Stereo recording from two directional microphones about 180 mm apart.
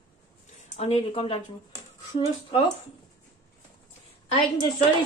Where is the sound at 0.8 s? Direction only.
35° left (ahead or behind).